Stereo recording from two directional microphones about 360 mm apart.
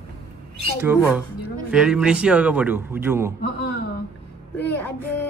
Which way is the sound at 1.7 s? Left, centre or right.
Centre.